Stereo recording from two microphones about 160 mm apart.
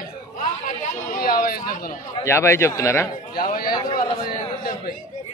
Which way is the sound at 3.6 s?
25° left (ahead or behind).